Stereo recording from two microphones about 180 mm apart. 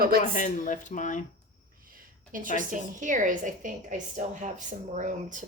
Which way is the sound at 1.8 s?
50° right (ahead or behind).